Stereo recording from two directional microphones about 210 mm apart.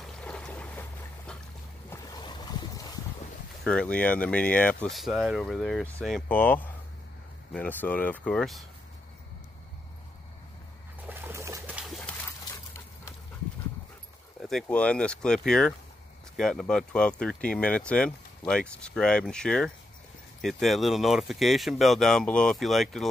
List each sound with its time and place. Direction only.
0.0 s boat: 5° left (ahead or behind)
1.9 s boat: 20° left (ahead or behind)
3.6 s speech: 5° left (ahead or behind)
11.1 s a sound: 10° right (ahead or behind); by 12.8 s 10° left (ahead or behind)
14.5 s speech: 5° left (ahead or behind)